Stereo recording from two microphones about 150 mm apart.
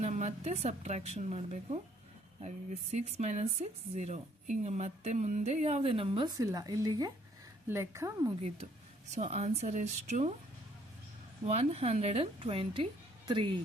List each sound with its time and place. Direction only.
0.0 s a woman's voice: 50° right (ahead or behind)
2.9 s a woman's voice: 45° right (ahead or behind)
6.3 s speech: 25° right (ahead or behind)
9.1 s a woman's voice: 45° right (ahead or behind)
11.4 s speech: 45° right (ahead or behind)